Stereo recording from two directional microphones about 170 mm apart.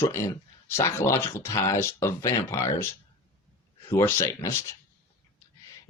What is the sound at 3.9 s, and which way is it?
Speech, 15° left (ahead or behind).